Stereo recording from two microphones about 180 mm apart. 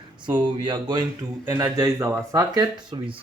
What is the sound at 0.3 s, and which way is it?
Speech, 25° right (ahead or behind).